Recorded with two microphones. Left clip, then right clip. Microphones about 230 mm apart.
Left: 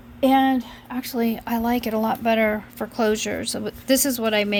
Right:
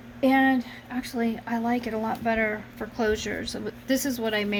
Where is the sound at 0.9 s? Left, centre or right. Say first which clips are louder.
Left 4 dB; left.